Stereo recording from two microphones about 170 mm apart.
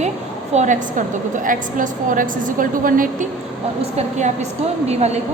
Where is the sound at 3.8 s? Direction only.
40° right (ahead or behind).